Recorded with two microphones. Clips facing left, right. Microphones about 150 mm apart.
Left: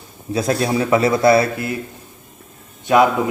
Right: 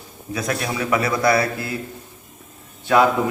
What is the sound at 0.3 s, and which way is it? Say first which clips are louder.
A man's voice: left 6 dB; 30° left (ahead or behind).